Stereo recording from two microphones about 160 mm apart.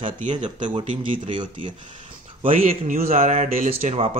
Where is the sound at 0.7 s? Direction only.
30° right (ahead or behind).